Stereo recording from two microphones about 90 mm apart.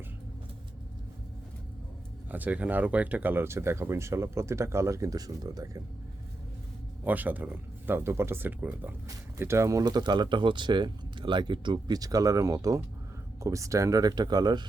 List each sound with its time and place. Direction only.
2.3 s speech: 15° right (ahead or behind); by 5.8 s 45° right (ahead or behind)
7.0 s speech: 20° right (ahead or behind)
9.4 s speech: 30° right (ahead or behind)
9.8 s speech: 50° right (ahead or behind)
11.9 s speech: 40° right (ahead or behind)